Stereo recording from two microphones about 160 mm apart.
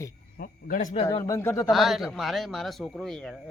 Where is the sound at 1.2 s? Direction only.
20° left (ahead or behind).